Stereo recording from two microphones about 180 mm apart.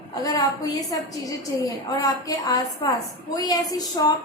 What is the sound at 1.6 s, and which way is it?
A woman's voice, 20° left (ahead or behind).